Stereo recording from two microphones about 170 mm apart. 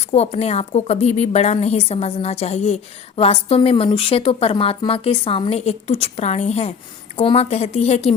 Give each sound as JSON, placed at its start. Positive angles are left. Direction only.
{"t": 0.0, "sound": "a woman's voice", "side_deg": 40}